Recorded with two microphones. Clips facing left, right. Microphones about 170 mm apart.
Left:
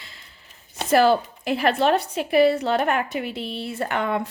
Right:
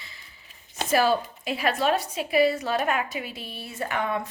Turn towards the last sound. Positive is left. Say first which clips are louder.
# left 4 dB
turn(degrees=65)  # may be behind; listen again after turning